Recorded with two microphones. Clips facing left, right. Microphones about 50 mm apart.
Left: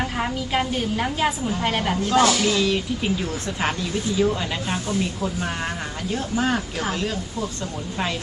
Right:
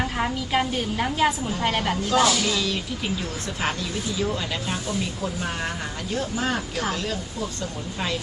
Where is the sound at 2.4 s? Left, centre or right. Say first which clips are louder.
Left 5 dB; centre.